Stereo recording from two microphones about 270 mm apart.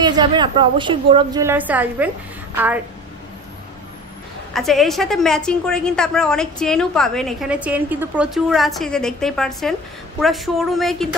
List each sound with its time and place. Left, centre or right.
0.0 s a woman's voice: centre
4.6 s a woman's voice: centre